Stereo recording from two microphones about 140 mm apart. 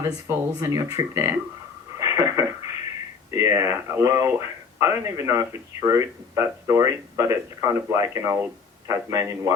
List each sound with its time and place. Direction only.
0.0 s speech: 20° right (ahead or behind)
2.0 s a sound: 20° right (ahead or behind)
3.3 s speech: 20° right (ahead or behind)